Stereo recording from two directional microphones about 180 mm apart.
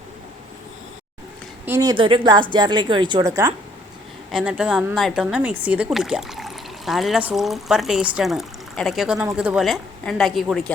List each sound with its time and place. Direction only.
1.6 s speech: 15° right (ahead or behind)
4.3 s speech: 5° right (ahead or behind)